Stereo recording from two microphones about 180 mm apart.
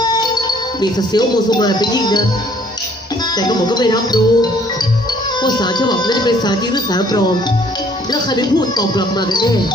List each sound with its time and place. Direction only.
0.0 s speech: 20° left (ahead or behind)
3.3 s speech: 25° left (ahead or behind)